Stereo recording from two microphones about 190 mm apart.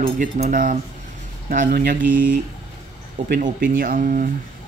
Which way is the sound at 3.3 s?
45° right (ahead or behind).